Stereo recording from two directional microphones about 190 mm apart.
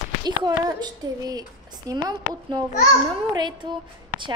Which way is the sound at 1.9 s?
20° right (ahead or behind).